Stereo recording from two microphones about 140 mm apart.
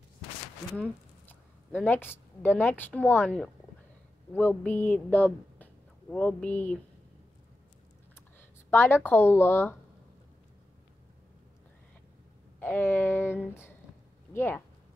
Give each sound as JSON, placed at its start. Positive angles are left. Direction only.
{"t": 0.7, "sound": "a woman's voice", "side_deg": 10}
{"t": 8.4, "sound": "speech", "side_deg": 15}
{"t": 12.5, "sound": "speech", "side_deg": 15}